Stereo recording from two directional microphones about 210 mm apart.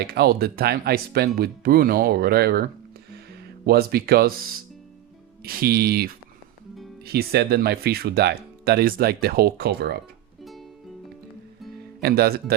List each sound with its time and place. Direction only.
0.0 s speech: 50° right (ahead or behind)
3.7 s speech: 50° right (ahead or behind)
5.4 s speech: 45° right (ahead or behind)
11.9 s speech: 50° right (ahead or behind)